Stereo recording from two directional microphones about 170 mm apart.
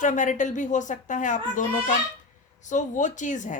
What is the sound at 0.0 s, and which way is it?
Speech, 45° left (ahead or behind).